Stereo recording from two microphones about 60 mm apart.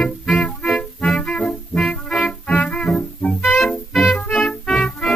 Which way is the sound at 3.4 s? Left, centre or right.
Centre.